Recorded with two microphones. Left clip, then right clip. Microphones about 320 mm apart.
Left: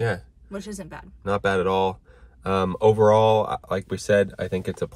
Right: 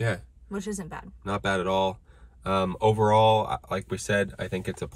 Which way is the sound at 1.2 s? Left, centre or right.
Centre.